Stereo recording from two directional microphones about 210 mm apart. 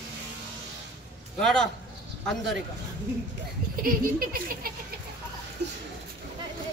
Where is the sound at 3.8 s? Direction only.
45° right (ahead or behind).